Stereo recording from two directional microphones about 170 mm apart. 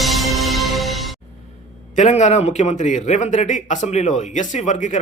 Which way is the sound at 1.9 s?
45° left (ahead or behind).